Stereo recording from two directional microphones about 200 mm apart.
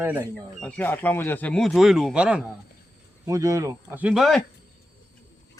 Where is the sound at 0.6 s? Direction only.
10° left (ahead or behind).